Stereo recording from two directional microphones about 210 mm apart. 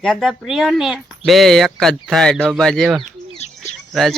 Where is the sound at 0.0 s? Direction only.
Centre (ahead or behind).